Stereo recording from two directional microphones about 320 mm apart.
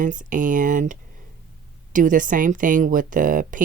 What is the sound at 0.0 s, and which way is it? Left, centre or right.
Speech, right.